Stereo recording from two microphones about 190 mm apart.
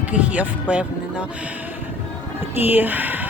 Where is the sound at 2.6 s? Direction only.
10° right (ahead or behind).